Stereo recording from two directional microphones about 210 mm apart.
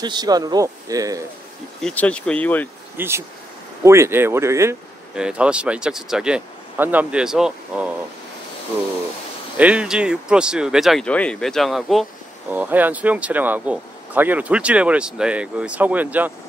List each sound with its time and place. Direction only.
0.0 s speech: 20° right (ahead or behind)
1.8 s speech: 5° left (ahead or behind)
3.0 s speech: 10° right (ahead or behind)
9.6 s speech: 5° right (ahead or behind)